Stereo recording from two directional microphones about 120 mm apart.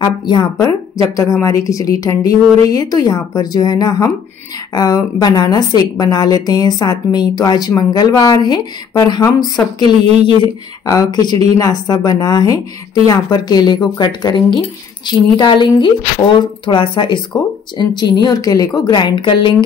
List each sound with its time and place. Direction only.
0.0 s a woman's voice: 35° left (ahead or behind)